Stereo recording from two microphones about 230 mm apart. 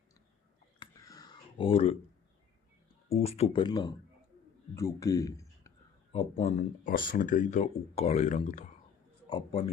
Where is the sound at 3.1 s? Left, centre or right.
Left.